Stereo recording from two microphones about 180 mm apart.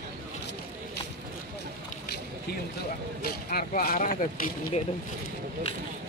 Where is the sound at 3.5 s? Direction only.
55° left (ahead or behind).